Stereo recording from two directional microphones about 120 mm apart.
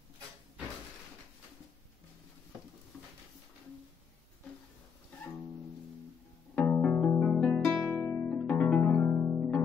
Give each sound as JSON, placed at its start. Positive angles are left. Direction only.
{"t": 6.5, "sound": "music", "side_deg": 15}
{"t": 7.8, "sound": "music", "side_deg": 25}
{"t": 8.3, "sound": "music", "side_deg": 10}